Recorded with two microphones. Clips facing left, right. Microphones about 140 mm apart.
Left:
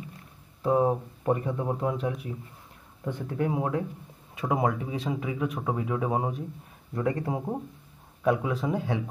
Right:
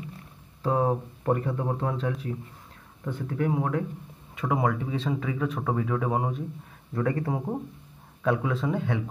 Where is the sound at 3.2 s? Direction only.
25° left (ahead or behind).